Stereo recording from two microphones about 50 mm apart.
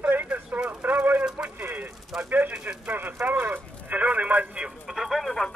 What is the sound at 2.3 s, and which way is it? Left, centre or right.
Speech, right.